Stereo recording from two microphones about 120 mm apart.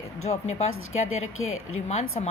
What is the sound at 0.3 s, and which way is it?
A woman's voice, 65° left (ahead or behind).